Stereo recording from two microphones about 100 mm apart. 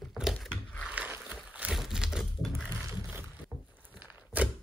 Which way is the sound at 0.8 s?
10° right (ahead or behind).